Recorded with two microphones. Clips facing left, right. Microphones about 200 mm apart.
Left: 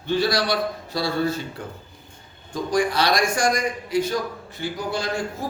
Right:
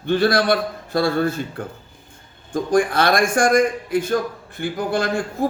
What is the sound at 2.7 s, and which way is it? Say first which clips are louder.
A man's voice: right 4 dB; 55° right (ahead or behind).